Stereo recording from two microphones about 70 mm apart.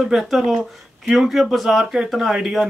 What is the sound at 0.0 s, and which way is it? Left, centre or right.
Speech, centre.